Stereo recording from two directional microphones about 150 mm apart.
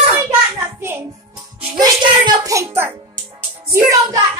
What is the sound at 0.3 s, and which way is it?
Hands, 15° right (ahead or behind).